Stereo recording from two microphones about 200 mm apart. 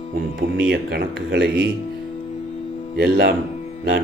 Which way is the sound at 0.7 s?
50° right (ahead or behind).